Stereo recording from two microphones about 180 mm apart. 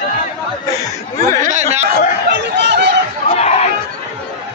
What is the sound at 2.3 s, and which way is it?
Speech, 70° right (ahead or behind).